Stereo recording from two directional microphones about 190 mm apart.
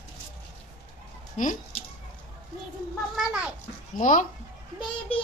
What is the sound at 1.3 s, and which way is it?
Chicken, 40° left (ahead or behind).